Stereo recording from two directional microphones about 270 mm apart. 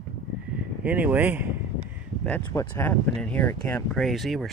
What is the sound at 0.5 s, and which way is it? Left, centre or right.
Speech, centre.